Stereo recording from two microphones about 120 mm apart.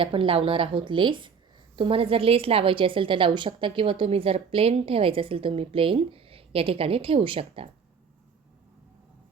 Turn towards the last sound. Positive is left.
turn(degrees=-50)  # may be behind; listen again after turning